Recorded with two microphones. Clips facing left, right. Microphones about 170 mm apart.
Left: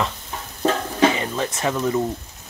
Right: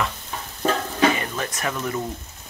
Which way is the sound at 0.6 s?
20° left (ahead or behind).